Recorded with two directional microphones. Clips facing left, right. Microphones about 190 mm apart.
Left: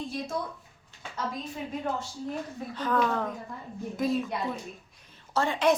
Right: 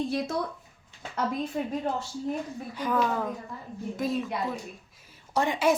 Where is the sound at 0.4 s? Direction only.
75° right (ahead or behind).